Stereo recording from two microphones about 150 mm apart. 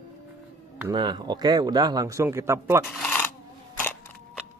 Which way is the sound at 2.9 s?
5° left (ahead or behind).